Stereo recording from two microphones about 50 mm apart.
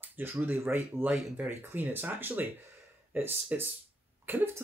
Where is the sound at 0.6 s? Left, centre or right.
Right.